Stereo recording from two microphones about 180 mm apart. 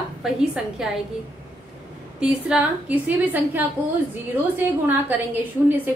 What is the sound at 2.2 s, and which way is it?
A woman's voice, 5° right (ahead or behind).